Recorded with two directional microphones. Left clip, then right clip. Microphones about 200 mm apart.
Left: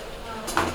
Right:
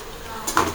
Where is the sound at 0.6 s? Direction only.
50° right (ahead or behind).